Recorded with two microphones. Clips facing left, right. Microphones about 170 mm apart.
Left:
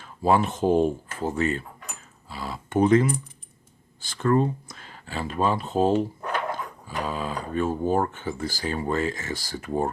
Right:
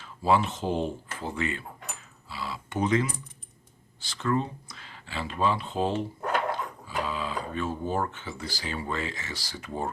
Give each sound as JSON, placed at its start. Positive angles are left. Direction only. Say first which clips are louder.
{"t": 0.0, "sound": "speech", "louder": "left 3 dB", "side_deg": 50}